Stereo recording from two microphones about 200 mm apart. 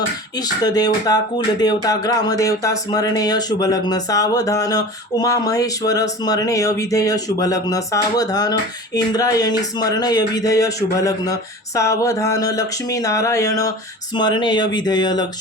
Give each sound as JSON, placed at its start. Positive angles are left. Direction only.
{"t": 0.6, "sound": "speech", "side_deg": 20}